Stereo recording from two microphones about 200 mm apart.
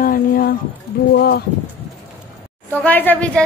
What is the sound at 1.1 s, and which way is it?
Speech, 55° left (ahead or behind).